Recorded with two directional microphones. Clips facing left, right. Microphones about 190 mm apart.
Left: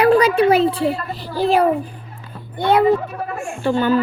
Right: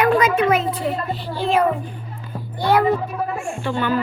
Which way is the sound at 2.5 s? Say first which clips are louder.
Left 2 dB; 20° left (ahead or behind).